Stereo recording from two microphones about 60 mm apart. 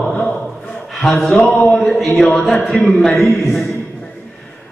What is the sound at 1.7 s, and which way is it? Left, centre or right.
A man's voice, centre.